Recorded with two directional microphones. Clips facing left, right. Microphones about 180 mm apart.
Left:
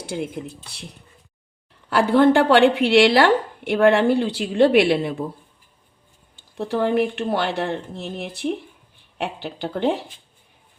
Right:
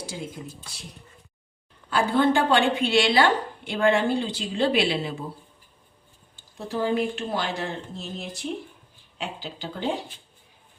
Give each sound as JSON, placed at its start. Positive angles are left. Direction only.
{"t": 0.0, "sound": "a woman's voice", "side_deg": 60}
{"t": 1.9, "sound": "a woman's voice", "side_deg": 60}
{"t": 6.6, "sound": "a woman's voice", "side_deg": 60}